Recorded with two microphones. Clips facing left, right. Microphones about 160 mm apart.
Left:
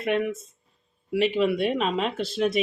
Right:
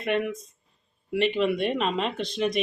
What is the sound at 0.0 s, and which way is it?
Speech, centre (ahead or behind).